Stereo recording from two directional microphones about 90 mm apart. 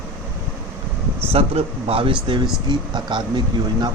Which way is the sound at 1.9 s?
75° right (ahead or behind).